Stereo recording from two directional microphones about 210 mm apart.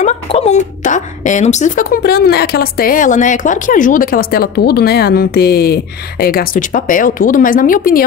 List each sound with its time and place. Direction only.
0.0 s speech: 30° left (ahead or behind)